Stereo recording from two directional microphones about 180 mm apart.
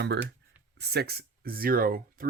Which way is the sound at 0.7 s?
65° right (ahead or behind).